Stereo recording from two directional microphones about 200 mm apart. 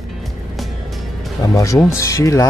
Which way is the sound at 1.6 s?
15° left (ahead or behind).